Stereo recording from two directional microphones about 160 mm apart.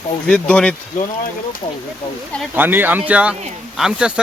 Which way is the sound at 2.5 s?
10° right (ahead or behind).